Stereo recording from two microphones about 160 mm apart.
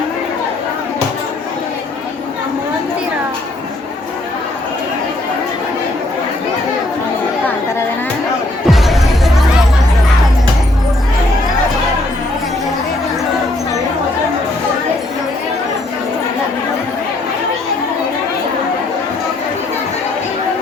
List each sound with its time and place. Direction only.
8.7 s music: centre (ahead or behind)